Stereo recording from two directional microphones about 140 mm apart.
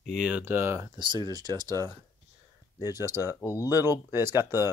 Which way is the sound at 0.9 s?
30° right (ahead or behind).